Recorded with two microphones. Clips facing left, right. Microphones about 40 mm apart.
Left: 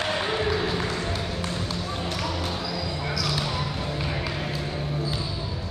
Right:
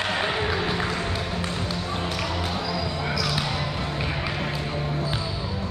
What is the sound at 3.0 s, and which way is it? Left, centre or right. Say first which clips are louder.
Basketball bounce: even; centre.